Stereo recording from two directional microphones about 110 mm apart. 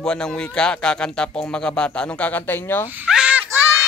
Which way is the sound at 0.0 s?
5° left (ahead or behind).